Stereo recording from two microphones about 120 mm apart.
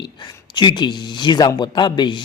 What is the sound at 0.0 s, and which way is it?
A man's voice, 40° left (ahead or behind).